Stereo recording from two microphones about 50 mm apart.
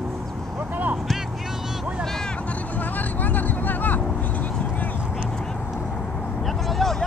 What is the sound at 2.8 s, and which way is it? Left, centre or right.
Vehicle, left.